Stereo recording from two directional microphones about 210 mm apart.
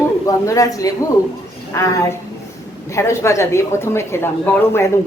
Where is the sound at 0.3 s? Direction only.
15° left (ahead or behind).